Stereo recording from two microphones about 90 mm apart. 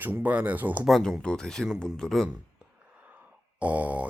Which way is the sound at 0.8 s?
Centre (ahead or behind).